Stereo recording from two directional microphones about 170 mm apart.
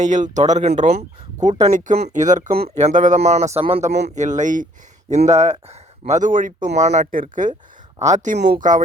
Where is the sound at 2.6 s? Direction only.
40° right (ahead or behind).